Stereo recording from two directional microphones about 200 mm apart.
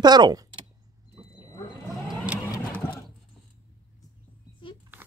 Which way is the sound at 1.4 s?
20° left (ahead or behind).